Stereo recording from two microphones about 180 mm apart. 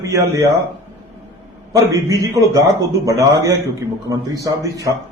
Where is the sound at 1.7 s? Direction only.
20° right (ahead or behind).